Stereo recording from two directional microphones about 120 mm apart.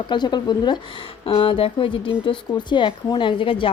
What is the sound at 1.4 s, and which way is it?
A woman's voice, 50° left (ahead or behind).